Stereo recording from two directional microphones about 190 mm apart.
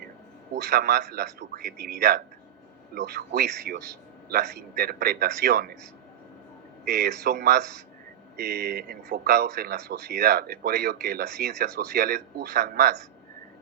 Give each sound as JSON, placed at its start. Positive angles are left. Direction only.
{"t": 0.5, "sound": "speech", "side_deg": -55}
{"t": 6.8, "sound": "speech", "side_deg": -55}